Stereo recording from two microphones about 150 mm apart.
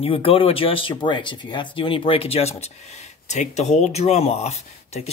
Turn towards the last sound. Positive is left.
turn(degrees=45)  # may be behind; listen again after turning